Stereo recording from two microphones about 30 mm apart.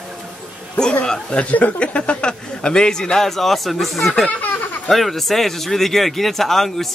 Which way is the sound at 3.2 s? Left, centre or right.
Centre.